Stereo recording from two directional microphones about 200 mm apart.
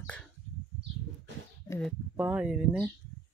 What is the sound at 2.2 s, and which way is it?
Speech, 5° right (ahead or behind).